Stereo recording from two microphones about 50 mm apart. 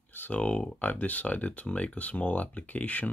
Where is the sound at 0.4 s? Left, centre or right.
Left.